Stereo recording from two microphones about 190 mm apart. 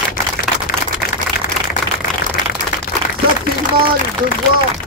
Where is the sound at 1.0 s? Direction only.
55° left (ahead or behind).